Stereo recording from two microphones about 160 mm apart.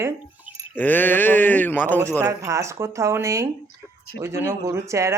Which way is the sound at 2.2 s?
20° right (ahead or behind).